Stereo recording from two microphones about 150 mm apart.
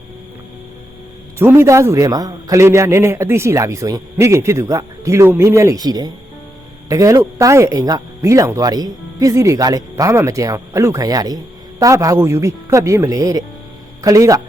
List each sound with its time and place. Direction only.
1.4 s speech: 15° right (ahead or behind)